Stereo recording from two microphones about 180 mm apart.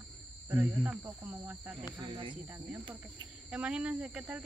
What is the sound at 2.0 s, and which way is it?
Speech, 25° right (ahead or behind).